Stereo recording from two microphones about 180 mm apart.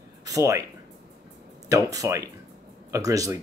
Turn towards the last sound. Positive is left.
turn(degrees=-20)  # may be behind; listen again after turning